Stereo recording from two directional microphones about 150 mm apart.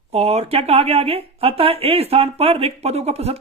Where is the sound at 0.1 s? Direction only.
45° right (ahead or behind).